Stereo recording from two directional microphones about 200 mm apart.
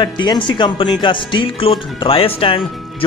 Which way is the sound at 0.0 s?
25° left (ahead or behind).